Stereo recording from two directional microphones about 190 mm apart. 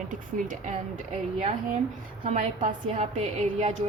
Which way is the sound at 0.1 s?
45° right (ahead or behind).